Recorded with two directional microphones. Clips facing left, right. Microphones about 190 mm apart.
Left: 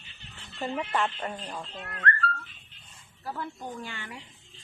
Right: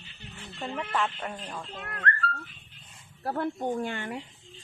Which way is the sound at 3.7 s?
50° right (ahead or behind).